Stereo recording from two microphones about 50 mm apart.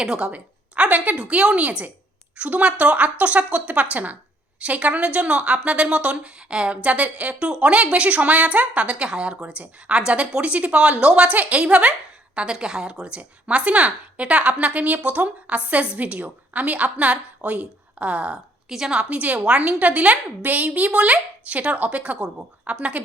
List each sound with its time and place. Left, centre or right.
0.0 s a woman's voice: centre
18.7 s a woman's voice: centre
18.9 s a woman's voice: right